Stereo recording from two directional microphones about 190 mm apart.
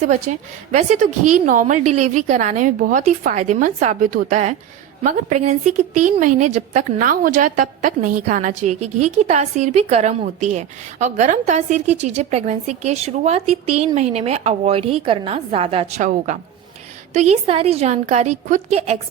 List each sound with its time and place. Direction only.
0.0 s a woman's voice: 40° right (ahead or behind)